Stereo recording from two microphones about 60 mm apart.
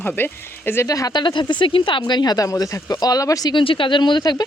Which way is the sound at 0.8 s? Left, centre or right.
Left.